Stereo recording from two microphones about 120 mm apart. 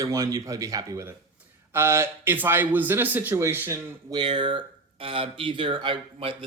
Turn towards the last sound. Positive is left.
turn(degrees=-45)  # may be behind; listen again after turning